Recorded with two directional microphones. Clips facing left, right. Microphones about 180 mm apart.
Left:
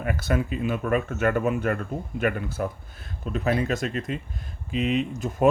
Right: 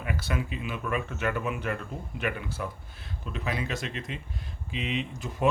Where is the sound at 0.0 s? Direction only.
50° left (ahead or behind).